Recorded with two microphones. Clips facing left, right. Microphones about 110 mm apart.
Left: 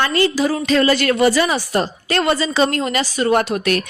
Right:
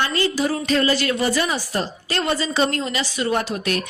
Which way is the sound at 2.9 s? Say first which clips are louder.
Left 5 dB; 45° left (ahead or behind).